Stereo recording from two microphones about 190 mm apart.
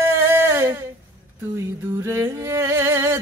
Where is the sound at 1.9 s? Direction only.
15° right (ahead or behind).